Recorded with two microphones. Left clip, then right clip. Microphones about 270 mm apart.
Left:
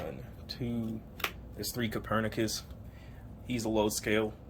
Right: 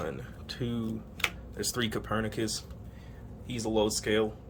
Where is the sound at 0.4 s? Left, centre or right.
Centre.